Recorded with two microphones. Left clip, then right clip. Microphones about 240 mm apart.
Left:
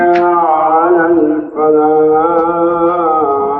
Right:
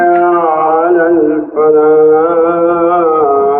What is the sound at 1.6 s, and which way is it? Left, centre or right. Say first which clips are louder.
Mantra: right 3 dB; left.